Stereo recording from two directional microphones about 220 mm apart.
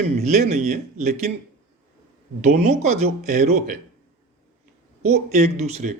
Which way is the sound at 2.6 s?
30° right (ahead or behind).